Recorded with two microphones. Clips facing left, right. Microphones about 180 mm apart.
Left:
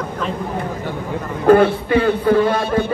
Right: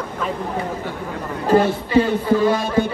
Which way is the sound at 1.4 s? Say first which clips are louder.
Left 5 dB; 55° left (ahead or behind).